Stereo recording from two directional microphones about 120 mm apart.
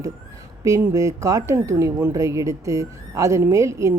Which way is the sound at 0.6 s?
25° right (ahead or behind).